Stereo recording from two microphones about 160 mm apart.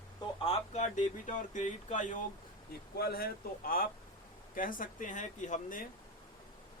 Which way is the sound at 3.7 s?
65° left (ahead or behind).